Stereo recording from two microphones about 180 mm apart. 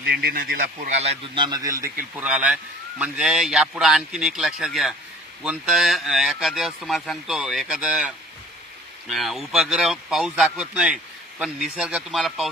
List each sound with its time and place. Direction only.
0.0 s speech: 60° right (ahead or behind)
0.8 s speech: 40° right (ahead or behind)
1.3 s a man's voice: 25° right (ahead or behind)
2.1 s speech: 5° right (ahead or behind)